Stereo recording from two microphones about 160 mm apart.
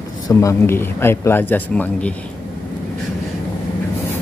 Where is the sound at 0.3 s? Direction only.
20° left (ahead or behind).